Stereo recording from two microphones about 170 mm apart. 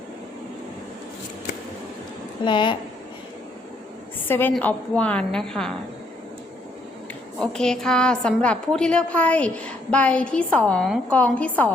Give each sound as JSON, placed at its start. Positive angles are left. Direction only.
{"t": 2.4, "sound": "a woman's voice", "side_deg": 25}
{"t": 4.3, "sound": "a woman's voice", "side_deg": 10}
{"t": 7.3, "sound": "a woman's voice", "side_deg": 5}